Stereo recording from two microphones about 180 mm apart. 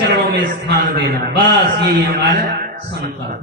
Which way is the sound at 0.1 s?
65° right (ahead or behind).